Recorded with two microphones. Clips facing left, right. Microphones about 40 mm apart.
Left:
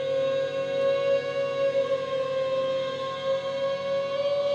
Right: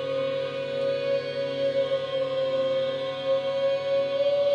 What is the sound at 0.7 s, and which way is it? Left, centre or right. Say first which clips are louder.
Music: left 2 dB; left.